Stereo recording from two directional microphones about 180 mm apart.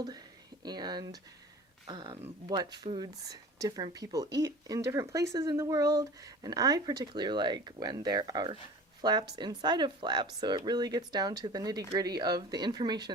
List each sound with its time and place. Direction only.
0.6 s speech: 25° right (ahead or behind)